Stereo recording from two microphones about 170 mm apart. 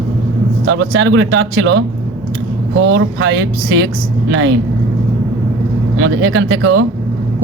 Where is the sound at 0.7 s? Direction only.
90° right.